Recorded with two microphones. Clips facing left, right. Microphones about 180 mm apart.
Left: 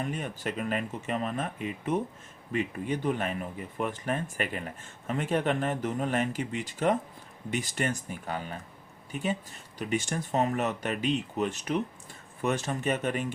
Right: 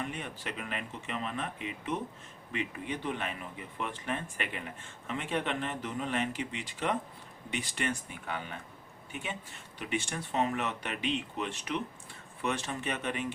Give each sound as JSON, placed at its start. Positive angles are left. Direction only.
{"t": 0.0, "sound": "speech", "side_deg": 40}